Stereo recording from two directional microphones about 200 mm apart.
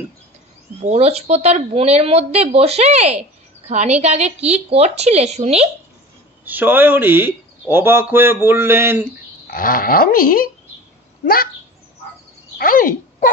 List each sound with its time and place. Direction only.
0.8 s speech: 30° right (ahead or behind)
6.4 s speech: 10° right (ahead or behind)
9.5 s speech: 45° left (ahead or behind)
12.5 s a sound: 45° left (ahead or behind)